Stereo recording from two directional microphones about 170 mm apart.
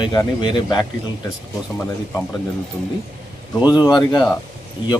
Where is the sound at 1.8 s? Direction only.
15° left (ahead or behind).